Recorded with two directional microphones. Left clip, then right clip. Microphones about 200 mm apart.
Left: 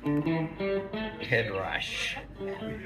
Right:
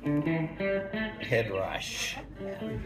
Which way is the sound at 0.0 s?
20° right (ahead or behind).